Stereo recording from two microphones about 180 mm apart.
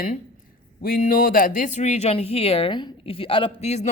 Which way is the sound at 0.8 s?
55° left (ahead or behind).